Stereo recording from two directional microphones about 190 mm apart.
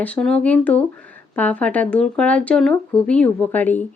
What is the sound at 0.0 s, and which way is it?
Speech, 5° left (ahead or behind).